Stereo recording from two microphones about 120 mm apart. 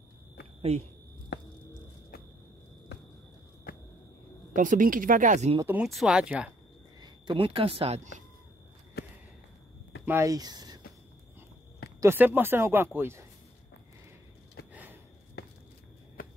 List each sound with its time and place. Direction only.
0.6 s speech: 60° right (ahead or behind)
4.6 s speech: 90° right
5.9 s speech: 5° right (ahead or behind)
7.0 s speech: 45° right (ahead or behind)
10.0 s speech: 25° right (ahead or behind)
12.0 s speech: 20° right (ahead or behind)
14.7 s gasp: 15° right (ahead or behind)